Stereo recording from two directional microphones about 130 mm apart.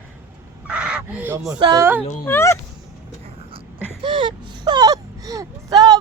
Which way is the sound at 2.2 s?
20° left (ahead or behind).